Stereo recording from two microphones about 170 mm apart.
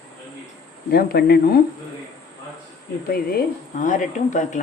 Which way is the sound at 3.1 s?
65° left (ahead or behind).